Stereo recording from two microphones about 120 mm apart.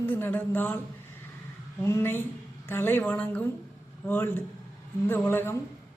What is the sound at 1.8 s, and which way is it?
A woman's voice, 20° left (ahead or behind).